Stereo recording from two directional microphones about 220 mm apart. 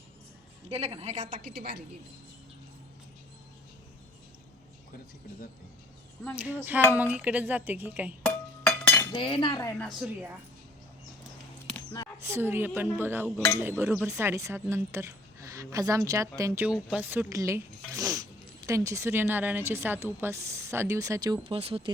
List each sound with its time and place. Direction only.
0.7 s a woman's voice: 30° right (ahead or behind)
6.3 s speech: 5° right (ahead or behind)
8.2 s chink: 5° left (ahead or behind)
9.1 s cutlery: 20° left (ahead or behind)
9.8 s a woman's voice: 5° right (ahead or behind)
12.2 s speech: 10° right (ahead or behind)
21.4 s speech: 25° right (ahead or behind)